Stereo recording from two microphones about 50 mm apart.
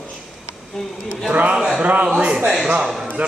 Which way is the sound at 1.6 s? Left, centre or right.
Centre.